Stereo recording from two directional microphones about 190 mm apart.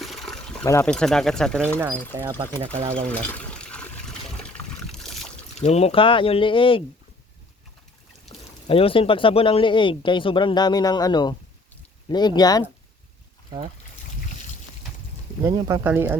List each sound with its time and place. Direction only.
0.0 s pour: centre (ahead or behind)
0.6 s speech: 15° left (ahead or behind)
0.9 s speech: 5° left (ahead or behind)
3.1 s trickle: 5° left (ahead or behind)
4.4 s boat: 5° left (ahead or behind)
5.5 s speech: 35° left (ahead or behind)
8.3 s pour: 30° left (ahead or behind)
8.6 s speech: 30° left (ahead or behind)
15.4 s speech: 20° right (ahead or behind)